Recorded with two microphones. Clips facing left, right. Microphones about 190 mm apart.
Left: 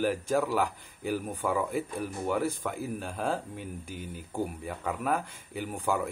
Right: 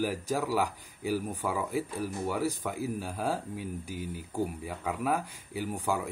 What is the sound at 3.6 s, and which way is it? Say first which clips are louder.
Speech: right 2 dB; 50° left (ahead or behind).